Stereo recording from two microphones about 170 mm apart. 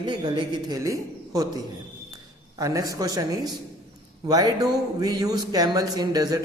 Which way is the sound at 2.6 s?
20° right (ahead or behind).